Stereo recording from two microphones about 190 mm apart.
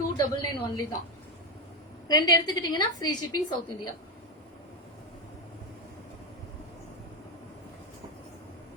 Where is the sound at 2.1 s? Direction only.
20° left (ahead or behind).